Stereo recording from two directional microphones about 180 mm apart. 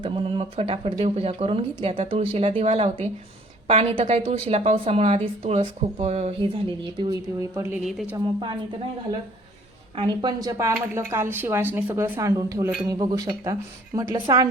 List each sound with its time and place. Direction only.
0.0 s speech: 30° right (ahead or behind)
7.0 s a woman's voice: 15° right (ahead or behind)
7.9 s a woman's voice: centre (ahead or behind)
8.1 s a woman's voice: 25° right (ahead or behind)
9.9 s a woman's voice: 30° right (ahead or behind)